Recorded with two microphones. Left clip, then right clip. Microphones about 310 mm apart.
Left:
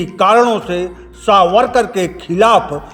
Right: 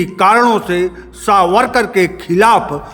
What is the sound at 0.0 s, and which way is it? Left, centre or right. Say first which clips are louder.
A man's voice: even; centre.